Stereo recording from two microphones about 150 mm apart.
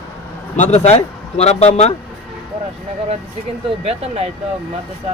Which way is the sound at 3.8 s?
40° right (ahead or behind).